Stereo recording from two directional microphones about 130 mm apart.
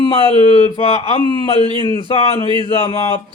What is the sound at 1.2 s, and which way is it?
A man's voice, 35° left (ahead or behind).